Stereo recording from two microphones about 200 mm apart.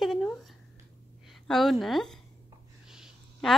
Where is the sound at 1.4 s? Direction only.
Centre (ahead or behind).